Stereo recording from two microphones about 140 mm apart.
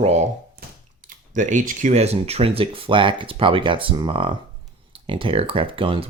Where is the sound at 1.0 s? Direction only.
70° right (ahead or behind); by 6.1 s 40° right (ahead or behind).